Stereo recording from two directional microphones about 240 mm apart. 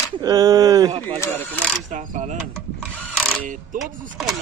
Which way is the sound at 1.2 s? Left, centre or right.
Centre.